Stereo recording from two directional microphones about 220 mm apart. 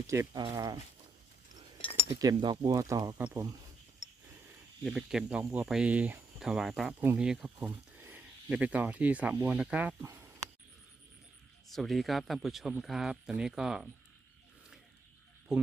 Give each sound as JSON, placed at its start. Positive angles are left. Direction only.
{"t": 0.1, "sound": "speech", "side_deg": -15}
{"t": 1.8, "sound": "cutlery", "side_deg": 25}
{"t": 2.2, "sound": "speech", "side_deg": -20}
{"t": 4.0, "sound": "a sound", "side_deg": 35}
{"t": 4.8, "sound": "speech", "side_deg": 0}
{"t": 11.7, "sound": "speech", "side_deg": 0}